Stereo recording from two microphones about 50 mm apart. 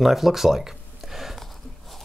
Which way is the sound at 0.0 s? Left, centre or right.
Centre.